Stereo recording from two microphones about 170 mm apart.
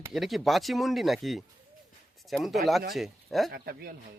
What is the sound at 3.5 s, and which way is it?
Speech, 65° right (ahead or behind).